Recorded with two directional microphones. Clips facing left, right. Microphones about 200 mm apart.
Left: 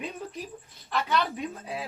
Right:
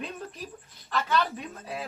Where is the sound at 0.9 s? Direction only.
15° left (ahead or behind).